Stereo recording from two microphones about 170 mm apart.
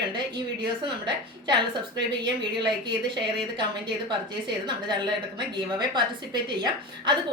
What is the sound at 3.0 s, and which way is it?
Speech, 30° right (ahead or behind).